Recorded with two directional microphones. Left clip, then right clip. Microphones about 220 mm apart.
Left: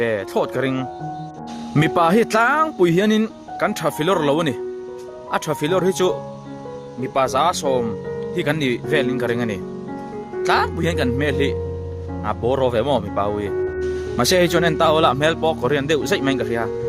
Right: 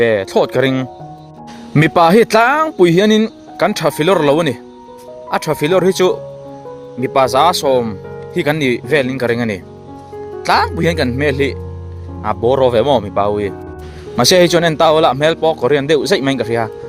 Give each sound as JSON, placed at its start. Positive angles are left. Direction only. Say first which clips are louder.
{"t": 0.0, "sound": "speech", "louder": "right 8 dB", "side_deg": -30}